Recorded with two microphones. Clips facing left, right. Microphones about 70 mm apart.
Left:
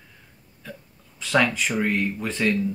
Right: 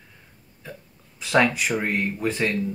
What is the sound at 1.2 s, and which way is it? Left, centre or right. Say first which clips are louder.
Speech: right 1 dB; centre.